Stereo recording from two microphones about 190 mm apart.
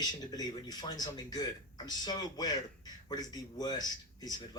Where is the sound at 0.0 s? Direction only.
20° left (ahead or behind).